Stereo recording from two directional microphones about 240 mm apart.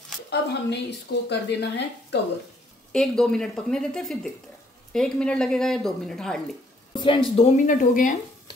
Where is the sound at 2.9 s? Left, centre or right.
Centre.